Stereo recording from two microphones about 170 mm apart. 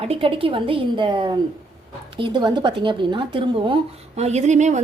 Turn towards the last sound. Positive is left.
turn(degrees=-45)  # may be behind; listen again after turning